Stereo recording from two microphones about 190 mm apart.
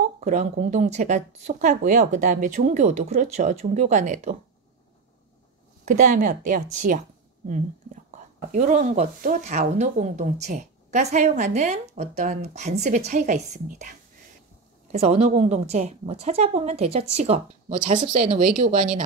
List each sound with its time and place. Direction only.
0.2 s speech: 40° right (ahead or behind)
5.9 s a woman's voice: 45° right (ahead or behind)